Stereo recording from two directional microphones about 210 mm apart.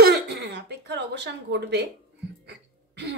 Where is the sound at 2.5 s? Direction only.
55° right (ahead or behind).